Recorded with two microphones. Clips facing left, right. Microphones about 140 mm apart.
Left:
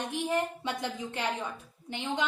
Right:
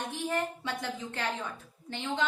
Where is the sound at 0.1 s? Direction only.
20° left (ahead or behind).